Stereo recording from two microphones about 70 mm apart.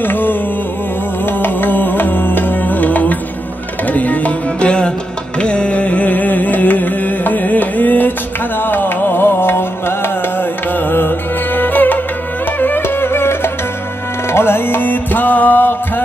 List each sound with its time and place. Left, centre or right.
0.0 s music: left
1.4 s music: left